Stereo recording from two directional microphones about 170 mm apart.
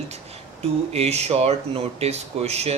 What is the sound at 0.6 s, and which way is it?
Speech, 35° right (ahead or behind).